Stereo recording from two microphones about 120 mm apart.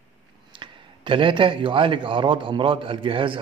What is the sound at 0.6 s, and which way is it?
A man's voice, 45° right (ahead or behind).